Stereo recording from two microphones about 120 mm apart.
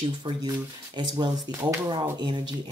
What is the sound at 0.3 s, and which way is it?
Speech, 45° right (ahead or behind).